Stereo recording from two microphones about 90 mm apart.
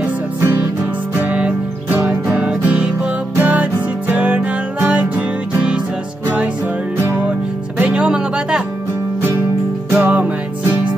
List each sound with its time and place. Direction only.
1.1 s music: 15° right (ahead or behind)
10.0 s music: 15° right (ahead or behind)